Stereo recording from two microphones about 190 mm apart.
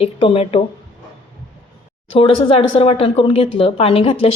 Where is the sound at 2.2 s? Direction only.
30° left (ahead or behind).